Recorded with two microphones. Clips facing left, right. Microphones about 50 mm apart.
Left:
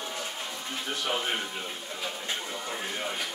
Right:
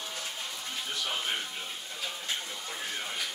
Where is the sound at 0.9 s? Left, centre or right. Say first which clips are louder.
Left 4 dB; left.